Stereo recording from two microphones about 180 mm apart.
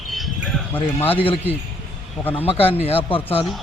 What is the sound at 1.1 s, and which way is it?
Speech, 30° left (ahead or behind).